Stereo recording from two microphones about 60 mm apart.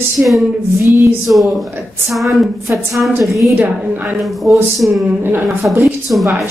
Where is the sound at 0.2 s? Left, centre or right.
Right.